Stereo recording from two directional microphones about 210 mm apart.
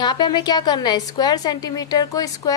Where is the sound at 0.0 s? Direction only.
20° left (ahead or behind).